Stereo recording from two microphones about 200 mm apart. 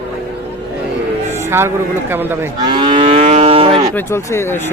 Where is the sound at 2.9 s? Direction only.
35° right (ahead or behind).